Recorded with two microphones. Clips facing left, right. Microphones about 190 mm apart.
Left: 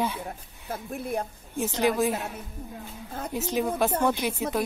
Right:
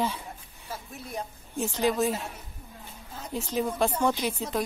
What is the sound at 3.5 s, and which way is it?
Speech, 5° left (ahead or behind).